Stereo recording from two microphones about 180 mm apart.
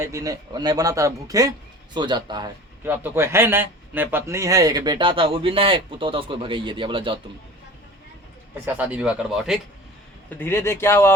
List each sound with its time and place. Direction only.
0.0 s a man's voice: 20° right (ahead or behind)
2.8 s a man's voice: 10° right (ahead or behind); by 7.2 s 30° right (ahead or behind)
8.6 s speech: 10° right (ahead or behind)
10.2 s speech: 10° left (ahead or behind)